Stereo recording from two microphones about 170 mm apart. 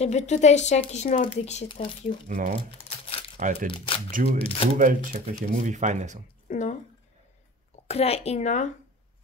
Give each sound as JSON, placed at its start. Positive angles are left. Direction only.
{"t": 0.0, "sound": "speech", "side_deg": 40}
{"t": 1.7, "sound": "speech", "side_deg": 30}
{"t": 2.2, "sound": "speech", "side_deg": -50}
{"t": 3.7, "sound": "speech", "side_deg": 30}
{"t": 4.7, "sound": "speech", "side_deg": -50}
{"t": 6.5, "sound": "speech", "side_deg": 45}
{"t": 7.9, "sound": "speech", "side_deg": 35}